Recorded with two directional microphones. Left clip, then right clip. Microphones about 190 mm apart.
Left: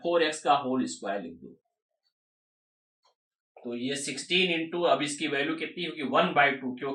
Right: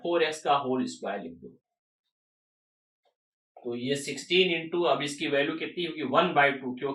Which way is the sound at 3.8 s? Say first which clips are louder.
Right 2 dB; 20° right (ahead or behind).